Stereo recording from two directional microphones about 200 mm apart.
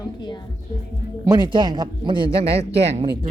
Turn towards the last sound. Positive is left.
turn(degrees=-30)  # may be behind; listen again after turning